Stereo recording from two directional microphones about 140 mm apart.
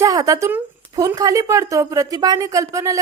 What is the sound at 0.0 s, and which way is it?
Speech, 25° right (ahead or behind).